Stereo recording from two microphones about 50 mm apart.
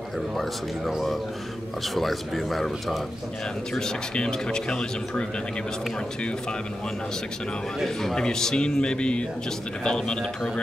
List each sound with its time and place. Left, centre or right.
0.4 s a man's voice: centre
3.7 s speech: centre
7.8 s speech: centre